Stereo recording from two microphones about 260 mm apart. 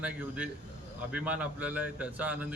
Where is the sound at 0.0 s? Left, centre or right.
Centre.